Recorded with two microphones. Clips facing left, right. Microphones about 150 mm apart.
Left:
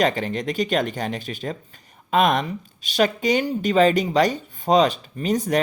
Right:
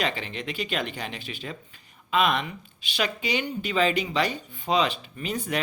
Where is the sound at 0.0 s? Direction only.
45° left (ahead or behind).